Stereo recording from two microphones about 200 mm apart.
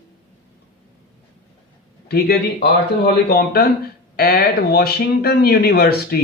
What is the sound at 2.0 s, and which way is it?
A man's voice, 50° left (ahead or behind).